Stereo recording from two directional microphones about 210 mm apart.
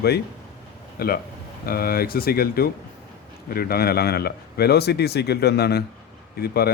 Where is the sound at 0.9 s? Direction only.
45° left (ahead or behind).